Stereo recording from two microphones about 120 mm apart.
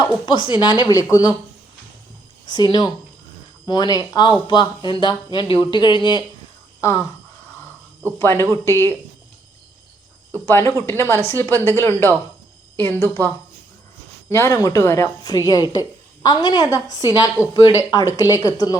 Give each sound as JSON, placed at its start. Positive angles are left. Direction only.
{"t": 0.3, "sound": "a woman's voice", "side_deg": 40}
{"t": 2.5, "sound": "a woman's voice", "side_deg": 35}
{"t": 6.8, "sound": "a woman's voice", "side_deg": 25}
{"t": 8.2, "sound": "a woman's voice", "side_deg": 20}
{"t": 10.4, "sound": "a woman's voice", "side_deg": 20}